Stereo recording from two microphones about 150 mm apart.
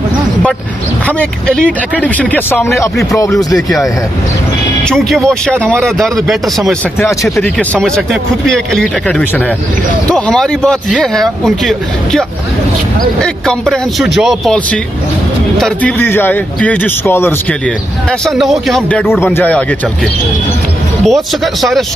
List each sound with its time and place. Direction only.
1.0 s speech: 5° left (ahead or behind)
3.5 s speech: centre (ahead or behind)
7.4 s speech: 5° left (ahead or behind)
16.0 s speech: 15° left (ahead or behind)
18.2 s speech: centre (ahead or behind)
21.0 s speech: centre (ahead or behind)